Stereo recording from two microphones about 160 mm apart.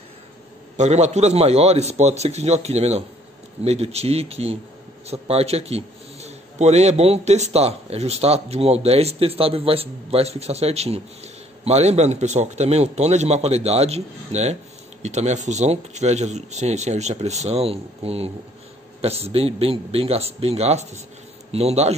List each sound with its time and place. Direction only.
0.7 s a man's voice: 45° right (ahead or behind)